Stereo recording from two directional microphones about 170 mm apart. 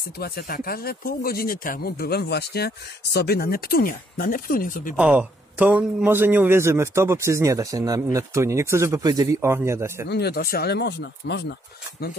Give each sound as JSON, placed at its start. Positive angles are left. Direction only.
{"t": 0.2, "sound": "speech", "side_deg": 65}
{"t": 4.9, "sound": "a man's voice", "side_deg": -10}
{"t": 10.0, "sound": "speech", "side_deg": 75}